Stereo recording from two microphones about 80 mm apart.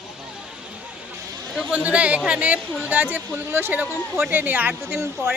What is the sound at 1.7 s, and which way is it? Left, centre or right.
Speech, centre.